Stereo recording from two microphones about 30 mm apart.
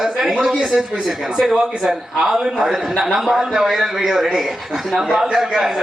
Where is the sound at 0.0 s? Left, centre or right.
Centre.